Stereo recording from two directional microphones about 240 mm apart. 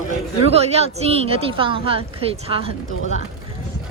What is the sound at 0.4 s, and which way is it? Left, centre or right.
A woman's voice, right.